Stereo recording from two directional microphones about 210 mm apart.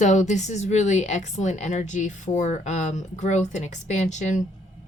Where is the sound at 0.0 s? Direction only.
35° left (ahead or behind).